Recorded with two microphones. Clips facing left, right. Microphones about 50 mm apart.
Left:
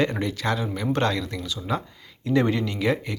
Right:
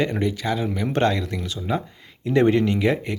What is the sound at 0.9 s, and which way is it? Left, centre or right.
Speech, right.